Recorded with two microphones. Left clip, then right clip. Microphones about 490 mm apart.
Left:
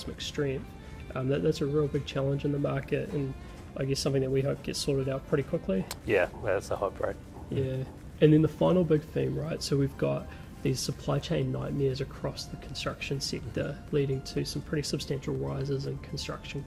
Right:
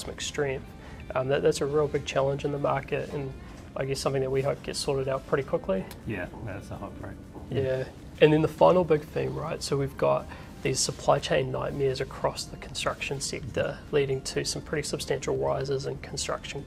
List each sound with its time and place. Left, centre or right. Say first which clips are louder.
0.0 s speech: right 3 dB; right
5.9 s speech: left 9 dB; left
8.2 s speech: right 4 dB; right